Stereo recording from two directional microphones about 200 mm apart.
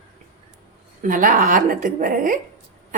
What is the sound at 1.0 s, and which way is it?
A woman's voice, 40° right (ahead or behind).